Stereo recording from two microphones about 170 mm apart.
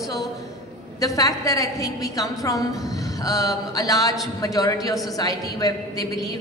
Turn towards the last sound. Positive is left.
turn(degrees=20)  # may be behind; listen again after turning